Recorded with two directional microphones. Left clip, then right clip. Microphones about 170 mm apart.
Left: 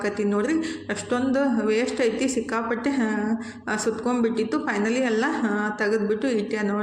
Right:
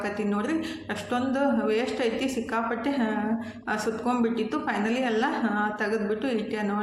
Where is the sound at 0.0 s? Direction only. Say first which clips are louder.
Left 5 dB; 25° left (ahead or behind).